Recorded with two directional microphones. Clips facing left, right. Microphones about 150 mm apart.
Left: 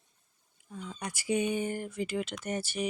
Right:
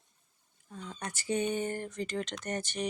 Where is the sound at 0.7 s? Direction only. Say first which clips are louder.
Left 1 dB; 5° left (ahead or behind).